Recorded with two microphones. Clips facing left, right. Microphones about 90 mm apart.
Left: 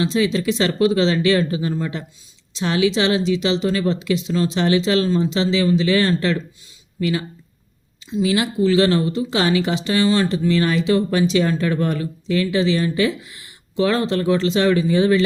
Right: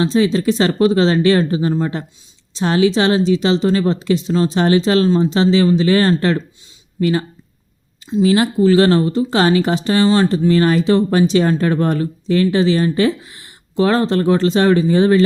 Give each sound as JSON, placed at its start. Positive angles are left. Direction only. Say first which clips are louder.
{"t": 0.0, "sound": "speech", "louder": "right 4 dB", "side_deg": -35}